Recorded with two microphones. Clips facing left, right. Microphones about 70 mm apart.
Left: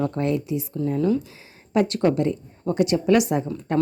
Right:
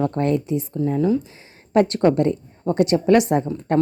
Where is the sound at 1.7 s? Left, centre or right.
Right.